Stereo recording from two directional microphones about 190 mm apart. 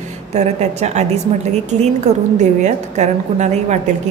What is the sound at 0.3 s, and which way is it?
A woman's voice, 35° right (ahead or behind).